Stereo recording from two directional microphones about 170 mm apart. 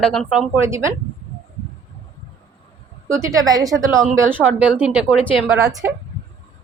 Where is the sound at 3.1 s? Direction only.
15° right (ahead or behind).